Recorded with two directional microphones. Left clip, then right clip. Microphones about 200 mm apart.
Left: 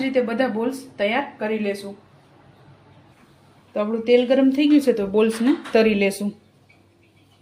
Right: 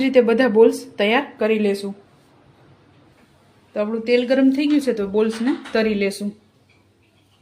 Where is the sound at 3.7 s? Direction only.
Centre (ahead or behind).